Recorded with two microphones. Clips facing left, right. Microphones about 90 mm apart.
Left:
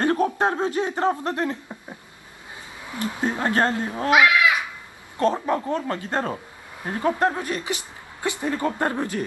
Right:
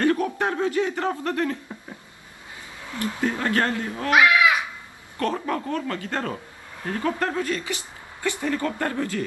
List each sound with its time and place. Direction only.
0.0 s a man's voice: 25° left (ahead or behind)
2.9 s a woman's voice: 20° left (ahead or behind)
5.2 s a woman's voice: 20° left (ahead or behind)